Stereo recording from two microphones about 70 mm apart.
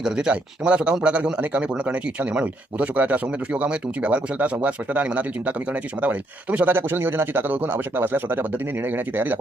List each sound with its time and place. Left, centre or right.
0.0 s speech: centre; by 9.4 s right